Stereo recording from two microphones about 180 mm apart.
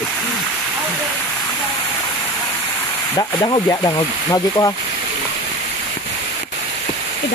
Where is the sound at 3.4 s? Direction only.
20° left (ahead or behind).